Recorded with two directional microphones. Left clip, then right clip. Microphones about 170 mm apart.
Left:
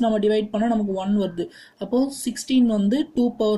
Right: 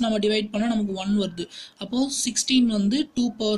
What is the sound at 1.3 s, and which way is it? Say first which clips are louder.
Speech: left 4 dB; 55° right (ahead or behind).